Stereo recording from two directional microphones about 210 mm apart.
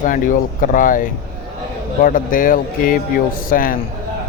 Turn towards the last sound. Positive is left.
turn(degrees=40)  # may be behind; listen again after turning